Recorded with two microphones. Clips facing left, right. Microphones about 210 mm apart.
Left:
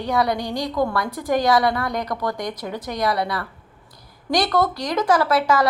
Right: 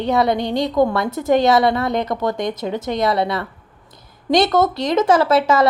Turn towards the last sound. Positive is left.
turn(degrees=-25)  # may be behind; listen again after turning